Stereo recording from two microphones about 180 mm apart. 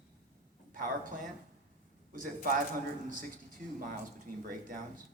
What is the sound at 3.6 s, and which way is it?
Speech, 50° right (ahead or behind).